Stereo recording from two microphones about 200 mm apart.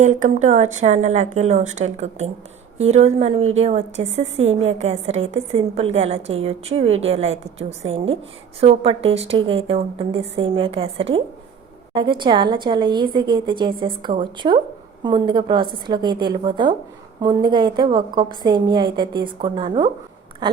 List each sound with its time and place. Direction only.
0.0 s a woman's voice: 35° right (ahead or behind); by 20.6 s 20° right (ahead or behind)